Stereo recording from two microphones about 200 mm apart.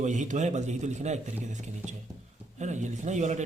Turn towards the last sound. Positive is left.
turn(degrees=-35)  # may be behind; listen again after turning